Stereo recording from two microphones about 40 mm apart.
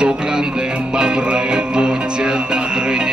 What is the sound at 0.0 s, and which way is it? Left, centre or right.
Music, centre.